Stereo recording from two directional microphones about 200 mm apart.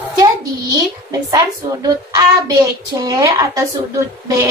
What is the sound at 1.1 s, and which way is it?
A woman's voice, 15° right (ahead or behind).